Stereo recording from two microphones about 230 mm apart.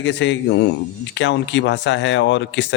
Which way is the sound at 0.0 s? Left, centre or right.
Left.